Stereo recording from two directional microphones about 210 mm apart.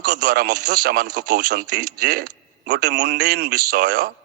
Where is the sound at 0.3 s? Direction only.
50° right (ahead or behind).